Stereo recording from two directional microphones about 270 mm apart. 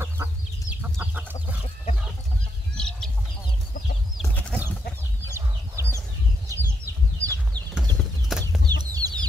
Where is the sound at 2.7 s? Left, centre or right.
Centre.